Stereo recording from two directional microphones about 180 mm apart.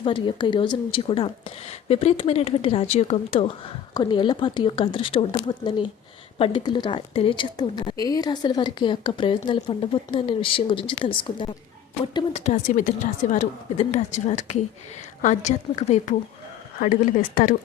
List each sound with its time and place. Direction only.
0.0 s a woman's voice: 25° left (ahead or behind); by 17.5 s 50° left (ahead or behind)